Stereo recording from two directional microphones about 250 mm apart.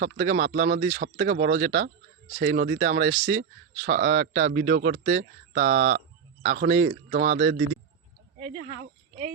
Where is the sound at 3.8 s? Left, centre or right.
Right.